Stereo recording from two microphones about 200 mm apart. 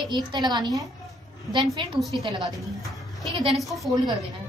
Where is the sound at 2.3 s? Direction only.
20° right (ahead or behind).